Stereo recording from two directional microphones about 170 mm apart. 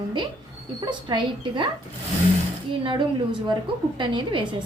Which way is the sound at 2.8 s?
30° right (ahead or behind).